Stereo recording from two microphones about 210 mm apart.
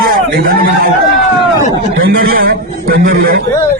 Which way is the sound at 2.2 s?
45° right (ahead or behind).